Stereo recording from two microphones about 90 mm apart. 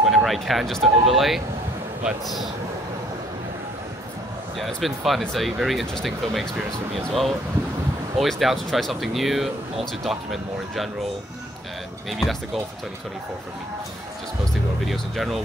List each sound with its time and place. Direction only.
0.0 s speech: centre (ahead or behind)
4.6 s speech: centre (ahead or behind)
12.1 s speech: centre (ahead or behind)
14.9 s speech: centre (ahead or behind)